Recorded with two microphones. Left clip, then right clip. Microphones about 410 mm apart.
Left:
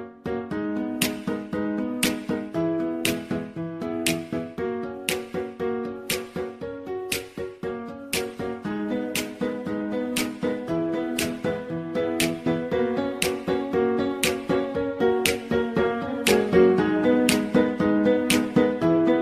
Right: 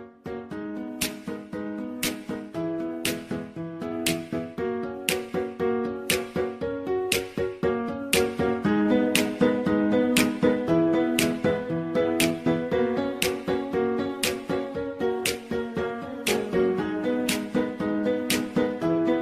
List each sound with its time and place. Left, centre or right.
0.3 s music: left
3.8 s music: centre
4.6 s music: centre; by 19.1 s left